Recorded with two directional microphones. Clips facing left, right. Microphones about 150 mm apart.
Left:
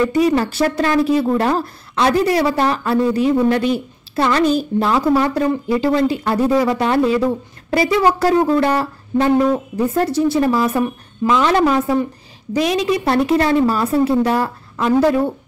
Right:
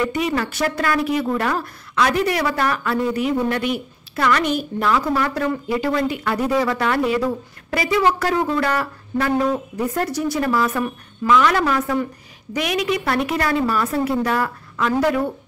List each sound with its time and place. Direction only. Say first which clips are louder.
0.0 s speech: left 6 dB; 30° left (ahead or behind)